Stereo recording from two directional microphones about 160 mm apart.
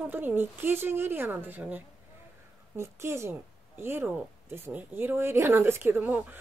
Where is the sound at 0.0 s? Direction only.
10° right (ahead or behind).